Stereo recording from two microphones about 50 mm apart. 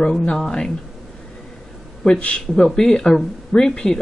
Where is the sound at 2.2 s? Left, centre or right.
Left.